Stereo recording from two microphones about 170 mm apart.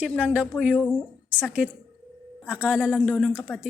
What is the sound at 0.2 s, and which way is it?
A woman's voice, 5° right (ahead or behind).